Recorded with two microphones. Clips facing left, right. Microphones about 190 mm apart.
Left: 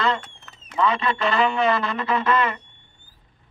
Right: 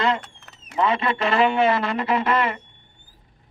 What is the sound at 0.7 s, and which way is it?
A man's voice, 25° right (ahead or behind).